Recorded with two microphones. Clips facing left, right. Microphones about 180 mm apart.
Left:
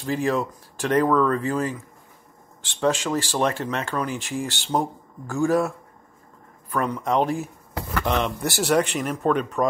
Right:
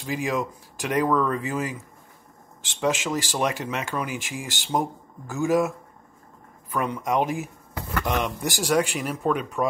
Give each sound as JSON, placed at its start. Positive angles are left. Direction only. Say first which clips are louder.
{"t": 0.0, "sound": "speech", "louder": "left 3 dB", "side_deg": -15}